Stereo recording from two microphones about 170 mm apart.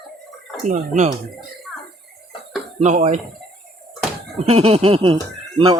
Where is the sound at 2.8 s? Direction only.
40° right (ahead or behind).